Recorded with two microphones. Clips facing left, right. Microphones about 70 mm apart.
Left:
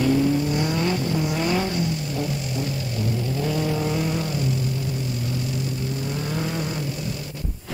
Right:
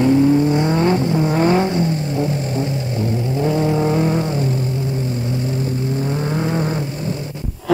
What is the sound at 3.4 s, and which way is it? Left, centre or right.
Vehicle, right.